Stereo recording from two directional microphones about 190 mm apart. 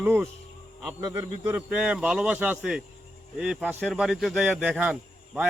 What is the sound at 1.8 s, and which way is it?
Speech, 5° right (ahead or behind).